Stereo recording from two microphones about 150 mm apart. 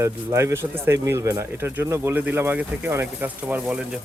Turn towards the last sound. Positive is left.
turn(degrees=-10)  # may be behind; listen again after turning